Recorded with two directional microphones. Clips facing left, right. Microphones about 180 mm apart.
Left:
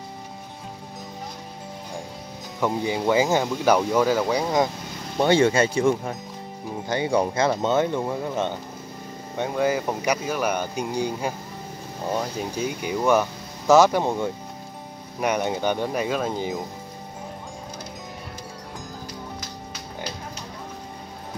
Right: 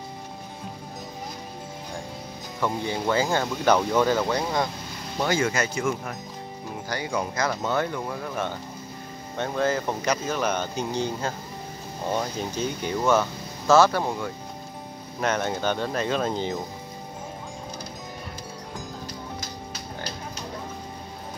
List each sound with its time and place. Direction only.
2.6 s speech: 15° left (ahead or behind)
5.2 s speech: 30° left (ahead or behind); by 16.5 s 5° left (ahead or behind)